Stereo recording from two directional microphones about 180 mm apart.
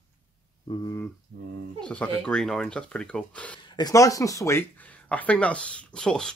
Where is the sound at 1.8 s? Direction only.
5° left (ahead or behind).